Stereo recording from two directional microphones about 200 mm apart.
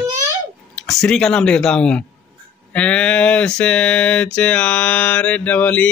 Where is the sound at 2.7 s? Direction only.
5° left (ahead or behind).